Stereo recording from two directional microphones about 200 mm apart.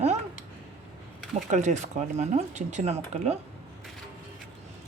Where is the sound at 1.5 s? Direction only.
35° right (ahead or behind).